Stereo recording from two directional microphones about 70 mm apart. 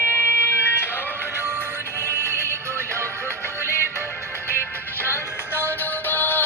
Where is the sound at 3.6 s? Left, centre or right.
Right.